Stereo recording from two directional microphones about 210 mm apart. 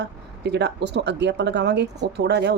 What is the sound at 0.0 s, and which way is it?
Speech, 55° right (ahead or behind).